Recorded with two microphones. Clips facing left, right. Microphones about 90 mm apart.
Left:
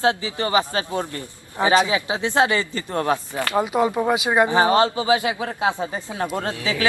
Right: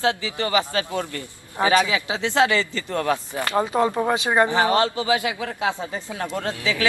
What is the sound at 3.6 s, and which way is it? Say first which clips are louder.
Speech: left 1 dB; 15° left (ahead or behind).